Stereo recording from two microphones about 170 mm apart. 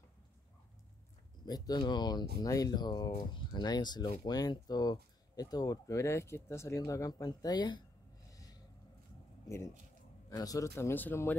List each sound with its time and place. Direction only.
1.4 s speech: 25° left (ahead or behind)
8.3 s a sound: 20° left (ahead or behind)
10.3 s a man's voice: 20° left (ahead or behind)